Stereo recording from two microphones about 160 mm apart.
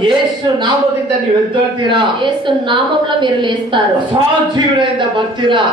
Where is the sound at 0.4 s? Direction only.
30° right (ahead or behind).